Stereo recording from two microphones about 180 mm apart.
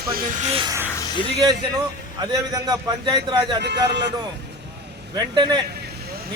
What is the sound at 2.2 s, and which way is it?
A man's voice, 20° right (ahead or behind).